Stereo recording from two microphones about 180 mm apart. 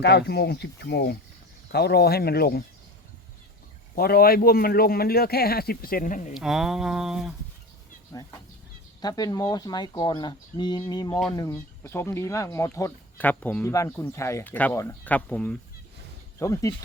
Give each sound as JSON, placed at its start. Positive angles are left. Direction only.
{"t": 0.0, "sound": "a man's voice", "side_deg": 65}
{"t": 3.9, "sound": "a man's voice", "side_deg": 55}
{"t": 6.3, "sound": "speech", "side_deg": 0}
{"t": 8.1, "sound": "speech", "side_deg": 20}
{"t": 16.4, "sound": "speech", "side_deg": 20}